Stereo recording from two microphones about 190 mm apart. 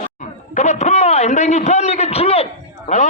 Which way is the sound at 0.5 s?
35° left (ahead or behind).